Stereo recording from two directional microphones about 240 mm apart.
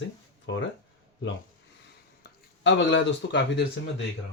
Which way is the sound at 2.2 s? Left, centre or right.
Left.